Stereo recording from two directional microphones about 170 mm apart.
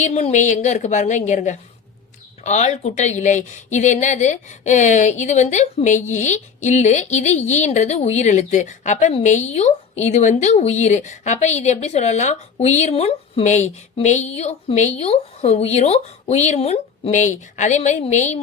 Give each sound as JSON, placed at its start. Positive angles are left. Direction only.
{"t": 0.0, "sound": "speech", "side_deg": 40}